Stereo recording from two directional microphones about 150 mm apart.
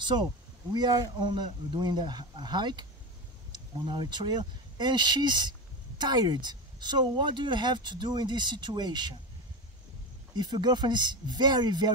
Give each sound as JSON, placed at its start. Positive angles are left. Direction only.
{"t": 0.0, "sound": "speech", "side_deg": -30}
{"t": 10.3, "sound": "speech", "side_deg": -30}